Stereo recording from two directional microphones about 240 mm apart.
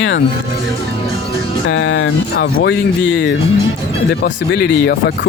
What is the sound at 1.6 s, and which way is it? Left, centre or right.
Speech, left.